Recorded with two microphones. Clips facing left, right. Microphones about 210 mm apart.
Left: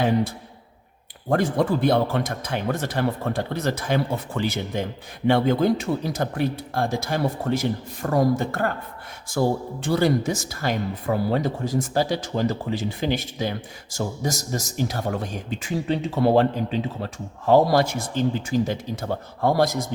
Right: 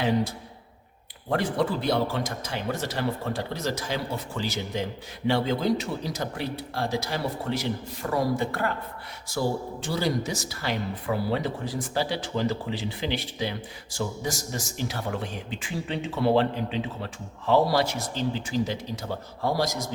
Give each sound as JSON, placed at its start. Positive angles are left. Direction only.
{"t": 1.3, "sound": "speech", "side_deg": 50}